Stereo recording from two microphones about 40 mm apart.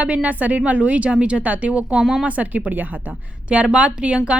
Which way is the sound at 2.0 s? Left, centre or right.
Centre.